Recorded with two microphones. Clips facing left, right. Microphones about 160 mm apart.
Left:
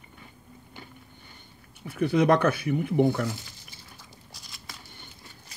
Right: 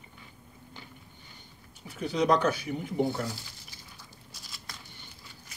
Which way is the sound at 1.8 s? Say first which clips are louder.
Left 5 dB; 60° left (ahead or behind).